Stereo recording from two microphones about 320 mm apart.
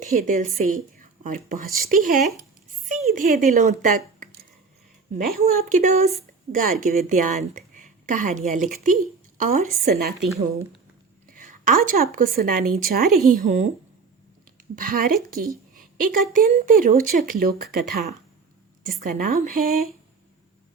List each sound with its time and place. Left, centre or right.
0.0 s a woman's voice: right
11.3 s a woman's voice: right
14.8 s a woman's voice: right
16.0 s a woman's voice: right
16.3 s a woman's voice: right
18.9 s a woman's voice: right